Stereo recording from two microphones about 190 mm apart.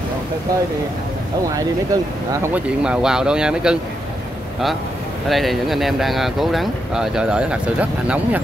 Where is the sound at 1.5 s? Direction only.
20° right (ahead or behind).